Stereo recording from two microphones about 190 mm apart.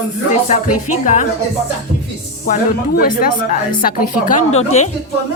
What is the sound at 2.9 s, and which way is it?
A woman's voice, 50° left (ahead or behind).